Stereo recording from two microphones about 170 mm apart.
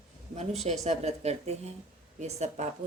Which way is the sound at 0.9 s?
40° right (ahead or behind).